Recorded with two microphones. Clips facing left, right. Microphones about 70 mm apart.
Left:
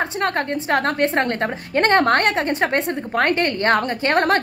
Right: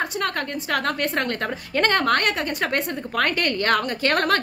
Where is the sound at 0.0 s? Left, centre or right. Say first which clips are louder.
Left 4 dB; left.